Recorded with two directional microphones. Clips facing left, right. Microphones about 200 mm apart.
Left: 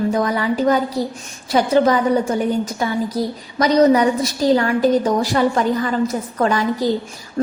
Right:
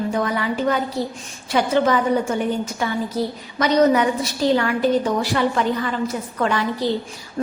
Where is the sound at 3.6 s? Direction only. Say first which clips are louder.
Left 3 dB; 35° left (ahead or behind).